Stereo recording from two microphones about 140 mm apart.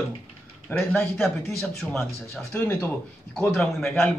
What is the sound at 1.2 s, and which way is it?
A man's voice, centre (ahead or behind).